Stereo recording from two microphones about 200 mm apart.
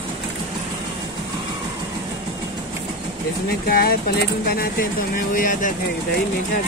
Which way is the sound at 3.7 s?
50° left (ahead or behind).